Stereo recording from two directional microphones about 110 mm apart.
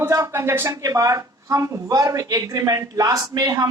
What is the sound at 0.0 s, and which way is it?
A woman's voice, 25° right (ahead or behind).